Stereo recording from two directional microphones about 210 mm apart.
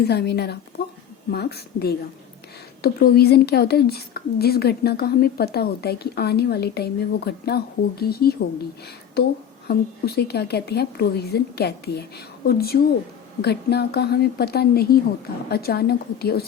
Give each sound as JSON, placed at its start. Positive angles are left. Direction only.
{"t": 0.0, "sound": "a woman's voice", "side_deg": 50}
{"t": 9.6, "sound": "a woman's voice", "side_deg": 50}